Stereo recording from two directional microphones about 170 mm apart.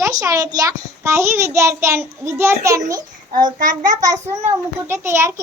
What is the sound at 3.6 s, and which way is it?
Speech, 50° right (ahead or behind).